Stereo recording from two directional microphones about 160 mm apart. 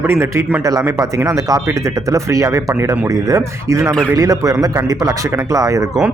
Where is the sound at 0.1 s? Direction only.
15° right (ahead or behind).